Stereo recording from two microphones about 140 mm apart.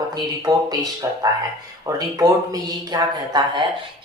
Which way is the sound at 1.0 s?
20° right (ahead or behind).